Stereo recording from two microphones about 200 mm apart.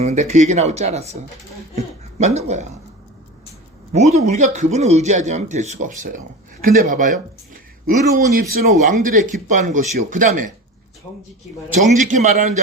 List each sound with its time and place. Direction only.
0.0 s speech: 35° right (ahead or behind)
1.7 s a sound: 35° right (ahead or behind)
3.9 s speech: 35° right (ahead or behind)
11.8 s speech: 35° right (ahead or behind)